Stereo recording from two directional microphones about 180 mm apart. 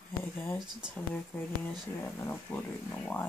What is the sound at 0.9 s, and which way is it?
Speech, 5° left (ahead or behind).